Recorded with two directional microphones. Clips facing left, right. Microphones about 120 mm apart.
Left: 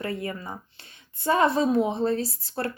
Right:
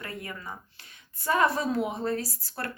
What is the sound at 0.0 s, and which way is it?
A woman's voice, 25° left (ahead or behind).